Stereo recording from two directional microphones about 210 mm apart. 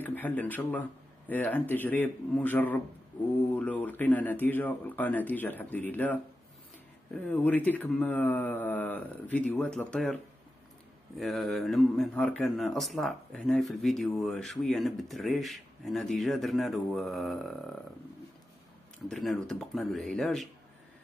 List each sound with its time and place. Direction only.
0.0 s speech: 10° left (ahead or behind)
7.2 s speech: 5° left (ahead or behind)
11.1 s speech: centre (ahead or behind)
19.0 s speech: centre (ahead or behind)